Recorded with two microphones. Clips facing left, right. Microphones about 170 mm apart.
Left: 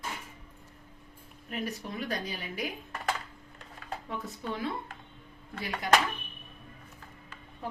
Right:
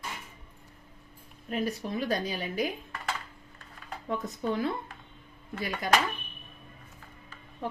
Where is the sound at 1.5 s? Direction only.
35° right (ahead or behind).